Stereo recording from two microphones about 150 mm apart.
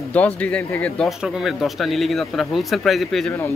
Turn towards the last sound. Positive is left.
turn(degrees=0)  # may be behind; listen again after turning